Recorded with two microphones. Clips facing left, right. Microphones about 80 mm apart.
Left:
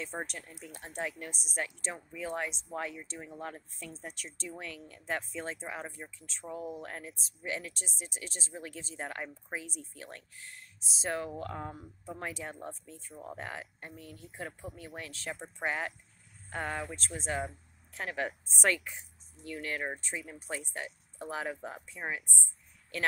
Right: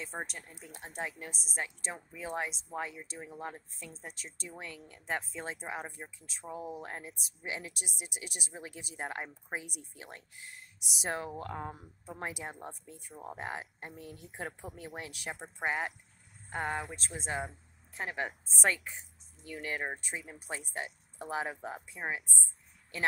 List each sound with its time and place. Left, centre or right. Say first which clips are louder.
0.0 s speech: left 2 dB; centre
3.9 s speech: left 3 dB; centre
4.5 s speech: left 3 dB; centre
15.0 s speech: left 1 dB; centre
19.5 s speech: even; centre